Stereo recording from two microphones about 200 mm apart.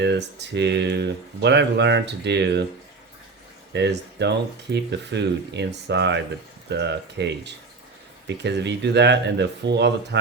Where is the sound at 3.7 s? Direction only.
60° right (ahead or behind).